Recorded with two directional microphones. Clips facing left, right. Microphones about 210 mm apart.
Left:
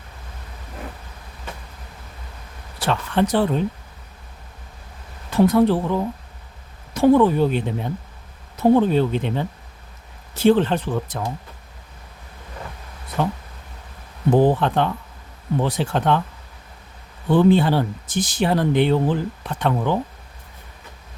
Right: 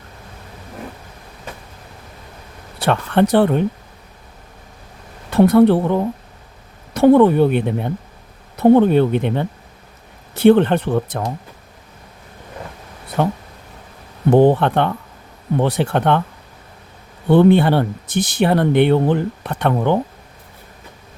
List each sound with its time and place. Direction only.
2.7 s speech: 60° right (ahead or behind)
5.3 s speech: 60° right (ahead or behind)
13.2 s speech: 60° right (ahead or behind)
17.2 s speech: 65° right (ahead or behind)